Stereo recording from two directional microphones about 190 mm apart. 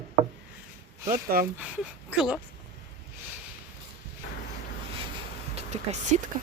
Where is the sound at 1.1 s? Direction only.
50° right (ahead or behind).